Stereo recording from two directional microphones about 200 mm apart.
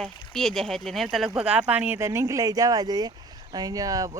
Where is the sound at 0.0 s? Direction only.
Centre (ahead or behind).